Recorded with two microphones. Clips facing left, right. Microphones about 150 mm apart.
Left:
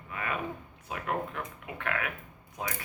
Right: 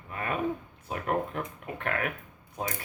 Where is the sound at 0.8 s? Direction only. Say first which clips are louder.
Right 3 dB; 40° right (ahead or behind).